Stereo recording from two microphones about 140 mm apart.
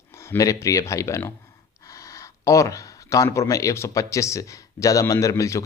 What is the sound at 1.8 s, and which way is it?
Speech, 25° left (ahead or behind).